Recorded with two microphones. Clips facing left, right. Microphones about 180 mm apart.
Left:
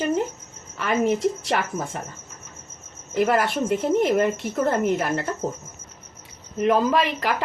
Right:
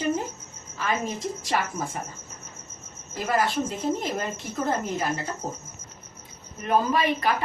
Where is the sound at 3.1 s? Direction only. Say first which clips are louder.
Left 4 dB; 65° left (ahead or behind).